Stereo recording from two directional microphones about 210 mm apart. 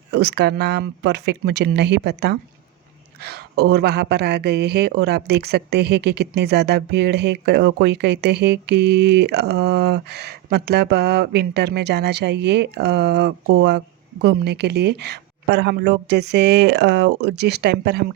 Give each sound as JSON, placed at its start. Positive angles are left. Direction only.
{"t": 0.1, "sound": "speech", "side_deg": -55}